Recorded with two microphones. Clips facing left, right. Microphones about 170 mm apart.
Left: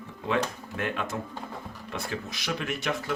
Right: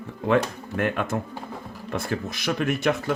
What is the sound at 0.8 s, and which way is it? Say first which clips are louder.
Speech: right 6 dB; 55° right (ahead or behind).